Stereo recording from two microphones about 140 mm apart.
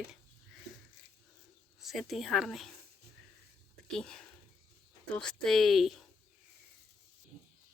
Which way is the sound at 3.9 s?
5° left (ahead or behind).